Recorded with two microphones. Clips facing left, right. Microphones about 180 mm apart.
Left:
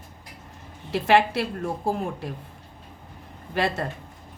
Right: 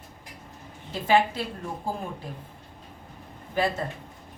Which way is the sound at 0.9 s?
75° left (ahead or behind).